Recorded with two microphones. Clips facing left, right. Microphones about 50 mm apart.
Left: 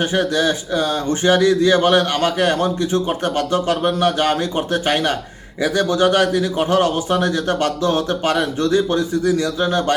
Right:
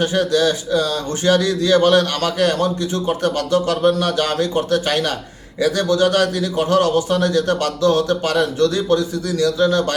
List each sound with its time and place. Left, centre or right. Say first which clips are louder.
0.0 s speech: right 1 dB; left